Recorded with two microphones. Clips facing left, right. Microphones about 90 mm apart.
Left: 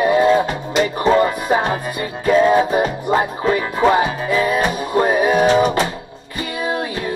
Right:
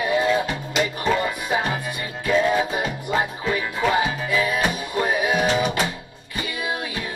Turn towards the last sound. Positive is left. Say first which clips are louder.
# left 7 dB
turn(degrees=40)  # may be behind; listen again after turning